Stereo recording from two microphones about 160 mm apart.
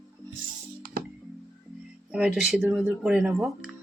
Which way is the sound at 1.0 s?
65° right (ahead or behind).